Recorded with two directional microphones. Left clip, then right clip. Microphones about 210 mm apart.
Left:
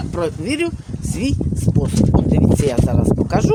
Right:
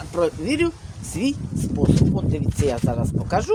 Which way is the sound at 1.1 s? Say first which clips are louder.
Left 2 dB; 25° left (ahead or behind).